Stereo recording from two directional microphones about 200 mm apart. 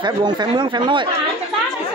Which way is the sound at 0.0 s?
20° right (ahead or behind).